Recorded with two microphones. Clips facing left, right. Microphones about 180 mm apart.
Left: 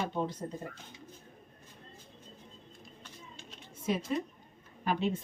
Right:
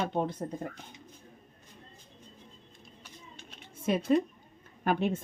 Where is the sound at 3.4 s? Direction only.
55° right (ahead or behind).